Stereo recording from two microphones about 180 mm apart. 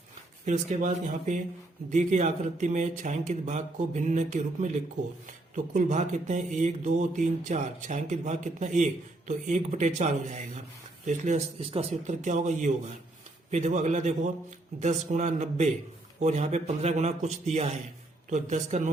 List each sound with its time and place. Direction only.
0.4 s speech: 40° right (ahead or behind)